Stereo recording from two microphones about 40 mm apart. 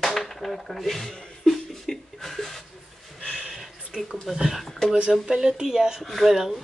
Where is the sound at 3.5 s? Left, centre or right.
Centre.